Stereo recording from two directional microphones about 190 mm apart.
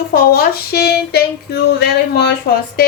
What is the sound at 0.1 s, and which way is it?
A woman's voice, 55° left (ahead or behind).